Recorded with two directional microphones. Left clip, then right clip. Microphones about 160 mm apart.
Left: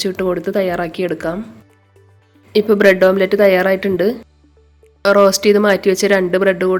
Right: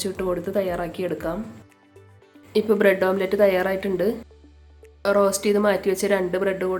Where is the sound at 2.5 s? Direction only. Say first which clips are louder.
Left 7 dB; 30° left (ahead or behind).